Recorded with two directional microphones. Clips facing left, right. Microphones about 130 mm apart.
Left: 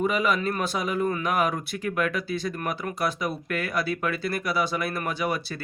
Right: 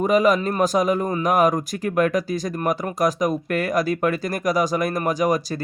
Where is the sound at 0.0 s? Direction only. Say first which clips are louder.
Right 7 dB; 40° right (ahead or behind).